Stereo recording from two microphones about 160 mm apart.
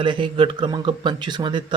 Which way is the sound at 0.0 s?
30° right (ahead or behind).